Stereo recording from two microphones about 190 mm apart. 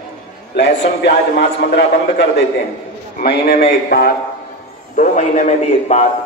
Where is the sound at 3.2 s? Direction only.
55° left (ahead or behind).